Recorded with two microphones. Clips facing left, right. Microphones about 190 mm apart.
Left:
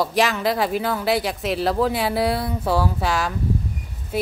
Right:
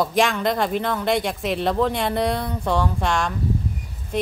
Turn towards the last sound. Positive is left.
turn(degrees=5)  # may be behind; listen again after turning